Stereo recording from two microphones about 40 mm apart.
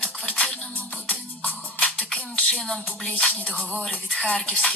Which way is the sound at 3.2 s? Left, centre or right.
Left.